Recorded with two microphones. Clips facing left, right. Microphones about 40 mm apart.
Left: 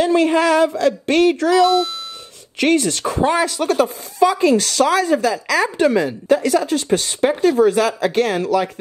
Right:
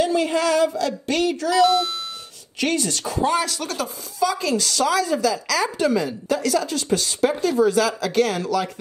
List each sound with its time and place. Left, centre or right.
0.0 s speech: left
1.5 s speech: centre
2.6 s speech: left
4.6 s speech: left